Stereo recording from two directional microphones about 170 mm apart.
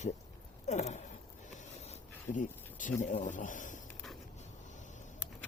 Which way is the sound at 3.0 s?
45° left (ahead or behind).